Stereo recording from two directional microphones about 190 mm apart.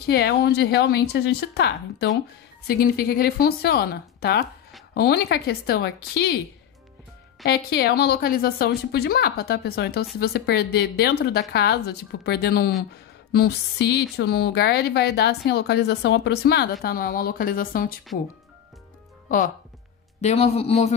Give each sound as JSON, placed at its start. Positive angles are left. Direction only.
{"t": 0.0, "sound": "speech", "side_deg": 60}
{"t": 7.4, "sound": "speech", "side_deg": 55}
{"t": 16.8, "sound": "speech", "side_deg": 50}
{"t": 20.2, "sound": "a man's voice", "side_deg": 35}